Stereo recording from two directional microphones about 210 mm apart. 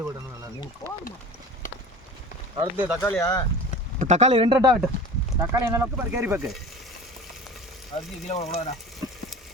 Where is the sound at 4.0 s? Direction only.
30° right (ahead or behind); by 6.4 s 10° right (ahead or behind).